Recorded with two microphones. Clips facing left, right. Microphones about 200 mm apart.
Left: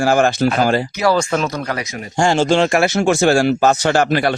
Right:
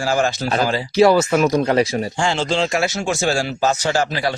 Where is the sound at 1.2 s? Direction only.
10° right (ahead or behind).